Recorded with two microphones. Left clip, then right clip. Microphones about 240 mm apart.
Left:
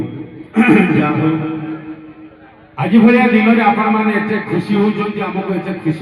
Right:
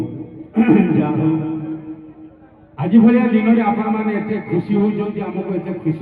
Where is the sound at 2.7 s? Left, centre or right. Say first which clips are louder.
Left 3 dB; left.